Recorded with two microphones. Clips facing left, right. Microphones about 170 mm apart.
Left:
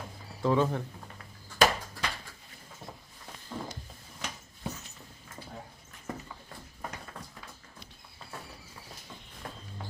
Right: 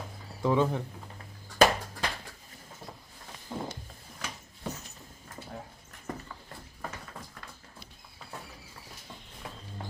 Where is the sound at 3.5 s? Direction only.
20° right (ahead or behind).